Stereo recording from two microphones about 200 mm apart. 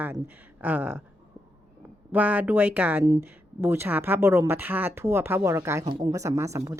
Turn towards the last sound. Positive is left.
turn(degrees=-15)  # may be behind; listen again after turning